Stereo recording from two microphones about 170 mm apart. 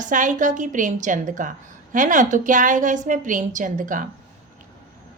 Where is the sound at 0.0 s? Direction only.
50° right (ahead or behind).